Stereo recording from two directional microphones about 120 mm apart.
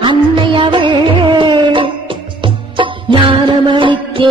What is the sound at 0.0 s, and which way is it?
Music, 40° right (ahead or behind).